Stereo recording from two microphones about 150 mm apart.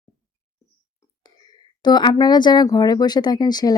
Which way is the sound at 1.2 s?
30° left (ahead or behind).